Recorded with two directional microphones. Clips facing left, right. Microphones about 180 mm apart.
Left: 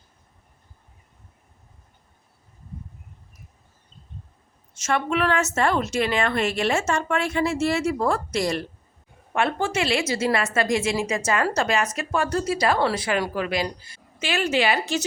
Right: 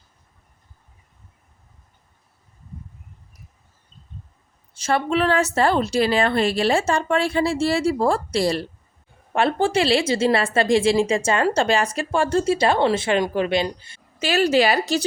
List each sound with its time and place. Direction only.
4.7 s a woman's voice: 30° right (ahead or behind)
14.2 s a woman's voice: 40° right (ahead or behind)